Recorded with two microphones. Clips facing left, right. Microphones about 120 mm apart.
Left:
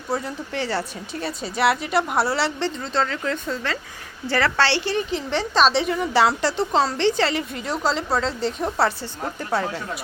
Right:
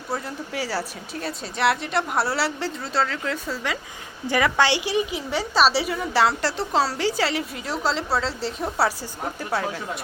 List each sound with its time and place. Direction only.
0.1 s a woman's voice: centre (ahead or behind)